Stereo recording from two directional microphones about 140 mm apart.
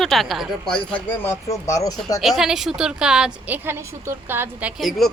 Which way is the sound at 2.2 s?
Centre (ahead or behind).